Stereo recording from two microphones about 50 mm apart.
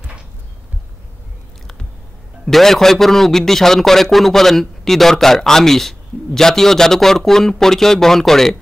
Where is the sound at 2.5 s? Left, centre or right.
Centre.